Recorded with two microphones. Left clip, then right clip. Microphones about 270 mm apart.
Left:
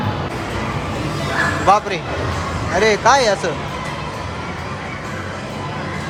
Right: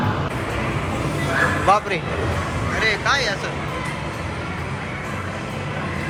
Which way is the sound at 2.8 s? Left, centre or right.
Left.